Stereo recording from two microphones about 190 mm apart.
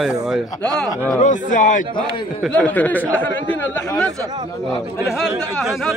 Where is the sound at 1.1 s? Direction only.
40° left (ahead or behind).